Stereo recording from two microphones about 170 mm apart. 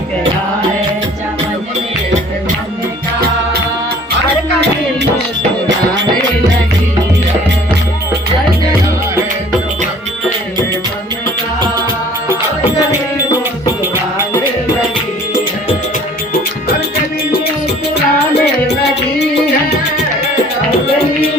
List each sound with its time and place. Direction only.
17.9 s music: 85° left